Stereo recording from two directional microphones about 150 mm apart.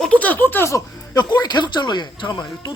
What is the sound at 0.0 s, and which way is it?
Speech, 10° left (ahead or behind).